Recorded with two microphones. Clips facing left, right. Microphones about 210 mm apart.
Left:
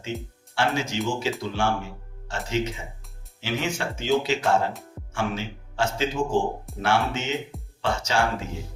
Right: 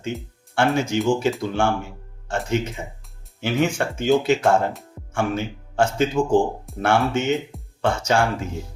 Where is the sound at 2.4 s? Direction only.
50° right (ahead or behind).